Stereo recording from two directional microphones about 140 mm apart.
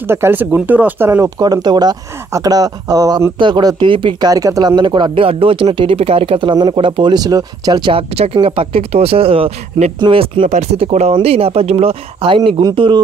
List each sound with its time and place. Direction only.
0.0 s speech: 15° right (ahead or behind)
1.4 s speech: 30° right (ahead or behind)
8.1 s speech: 45° right (ahead or behind)
9.9 s speech: 35° right (ahead or behind)
10.4 s speech: 55° right (ahead or behind); by 13.0 s 35° right (ahead or behind)